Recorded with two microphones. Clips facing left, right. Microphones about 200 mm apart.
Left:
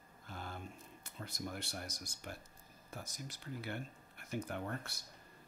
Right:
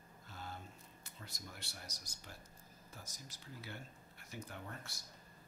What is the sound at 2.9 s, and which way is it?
Speech, 60° left (ahead or behind).